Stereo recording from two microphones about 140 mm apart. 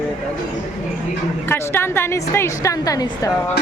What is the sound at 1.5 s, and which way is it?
A woman's voice, 15° left (ahead or behind).